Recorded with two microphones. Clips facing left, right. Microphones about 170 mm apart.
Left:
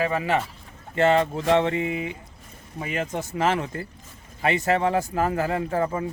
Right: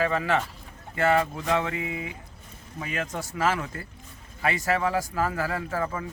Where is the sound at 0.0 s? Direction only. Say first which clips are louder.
Left 1 dB; 15° left (ahead or behind).